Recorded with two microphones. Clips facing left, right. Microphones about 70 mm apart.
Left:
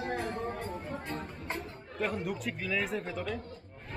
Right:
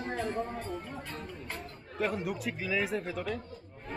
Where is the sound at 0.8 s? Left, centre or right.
Left.